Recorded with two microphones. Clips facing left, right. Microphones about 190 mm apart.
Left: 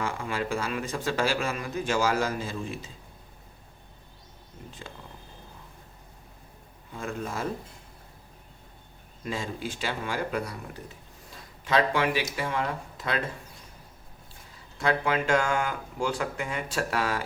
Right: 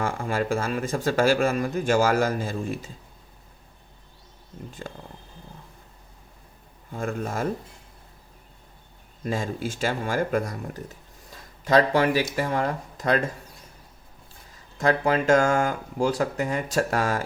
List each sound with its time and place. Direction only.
0.0 s speech: 45° right (ahead or behind)
4.8 s speech: 45° right (ahead or behind)
6.9 s speech: 50° right (ahead or behind)
9.2 s speech: 45° right (ahead or behind)
14.8 s speech: 40° right (ahead or behind)